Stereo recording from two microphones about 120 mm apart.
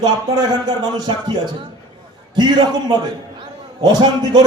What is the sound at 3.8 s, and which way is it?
Speech, 35° right (ahead or behind).